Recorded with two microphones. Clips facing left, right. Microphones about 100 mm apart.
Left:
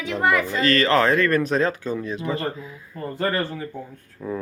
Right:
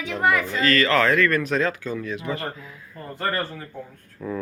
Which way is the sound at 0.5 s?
30° left (ahead or behind).